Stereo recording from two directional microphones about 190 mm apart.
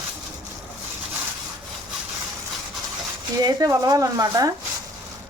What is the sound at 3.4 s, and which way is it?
Speech, 20° right (ahead or behind).